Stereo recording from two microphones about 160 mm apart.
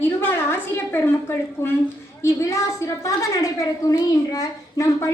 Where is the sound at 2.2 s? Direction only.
20° left (ahead or behind).